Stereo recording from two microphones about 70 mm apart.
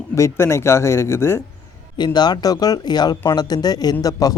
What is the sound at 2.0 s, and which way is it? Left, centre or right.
Speech, left.